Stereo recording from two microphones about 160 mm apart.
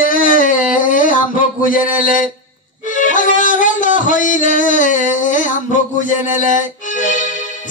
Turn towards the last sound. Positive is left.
turn(degrees=55)  # may be behind; listen again after turning